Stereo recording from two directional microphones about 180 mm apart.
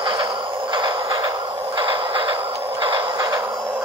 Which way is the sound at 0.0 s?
25° right (ahead or behind).